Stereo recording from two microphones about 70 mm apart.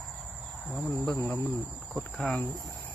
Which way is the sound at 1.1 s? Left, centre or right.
Left.